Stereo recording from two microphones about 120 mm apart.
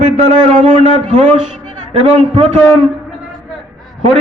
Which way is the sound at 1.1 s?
70° right (ahead or behind).